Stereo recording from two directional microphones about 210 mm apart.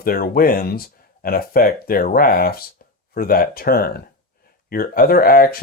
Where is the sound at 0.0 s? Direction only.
45° left (ahead or behind).